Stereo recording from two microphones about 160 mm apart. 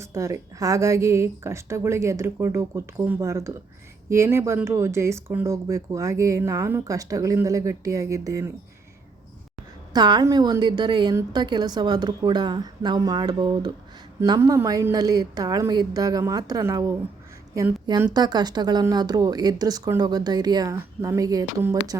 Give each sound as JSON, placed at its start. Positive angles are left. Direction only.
{"t": 0.0, "sound": "speech", "side_deg": -20}
{"t": 9.9, "sound": "speech", "side_deg": -25}
{"t": 18.1, "sound": "speech", "side_deg": -25}